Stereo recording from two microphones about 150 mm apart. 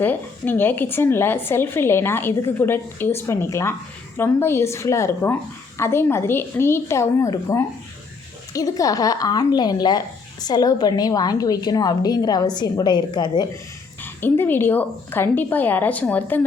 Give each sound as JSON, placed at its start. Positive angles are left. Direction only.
{"t": 0.0, "sound": "a woman's voice", "side_deg": 15}
{"t": 14.0, "sound": "speech", "side_deg": 15}